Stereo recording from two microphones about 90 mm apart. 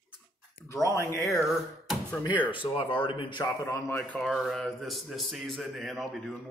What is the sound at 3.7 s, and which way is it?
Speech, 35° left (ahead or behind).